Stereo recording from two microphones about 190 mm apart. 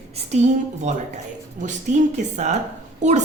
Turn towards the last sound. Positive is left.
turn(degrees=-35)  # may be behind; listen again after turning